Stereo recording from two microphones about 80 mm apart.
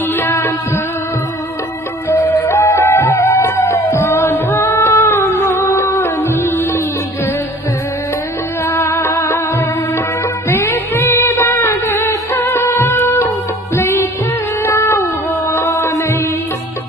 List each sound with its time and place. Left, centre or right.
0.2 s music: left
2.1 s music: left
2.4 s music: left
8.6 s music: left
10.5 s music: left
11.5 s music of bollywood: left
13.7 s music: left
14.6 s cat: left
15.5 s music: left